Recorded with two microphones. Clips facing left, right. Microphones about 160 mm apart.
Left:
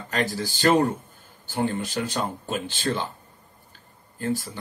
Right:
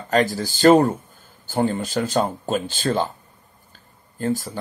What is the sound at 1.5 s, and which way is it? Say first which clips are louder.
Speech: right 4 dB; 35° right (ahead or behind).